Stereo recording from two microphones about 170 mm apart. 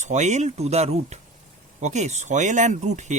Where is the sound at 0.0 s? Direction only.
45° right (ahead or behind).